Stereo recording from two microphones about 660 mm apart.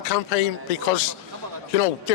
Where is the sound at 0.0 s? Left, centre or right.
Left.